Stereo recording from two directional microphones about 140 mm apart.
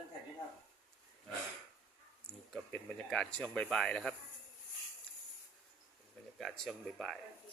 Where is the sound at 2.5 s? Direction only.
5° left (ahead or behind).